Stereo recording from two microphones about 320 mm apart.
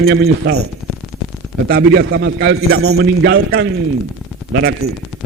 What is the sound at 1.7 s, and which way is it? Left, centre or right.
A man's voice, right.